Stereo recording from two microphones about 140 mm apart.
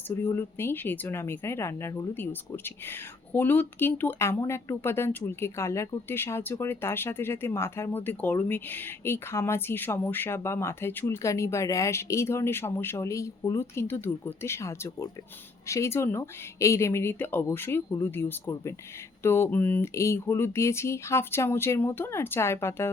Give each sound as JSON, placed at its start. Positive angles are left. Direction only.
{"t": 0.2, "sound": "speech", "side_deg": 15}